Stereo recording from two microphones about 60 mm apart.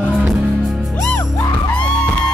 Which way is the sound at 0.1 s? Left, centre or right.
Centre.